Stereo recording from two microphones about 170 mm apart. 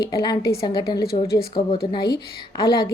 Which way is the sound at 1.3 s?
60° left (ahead or behind).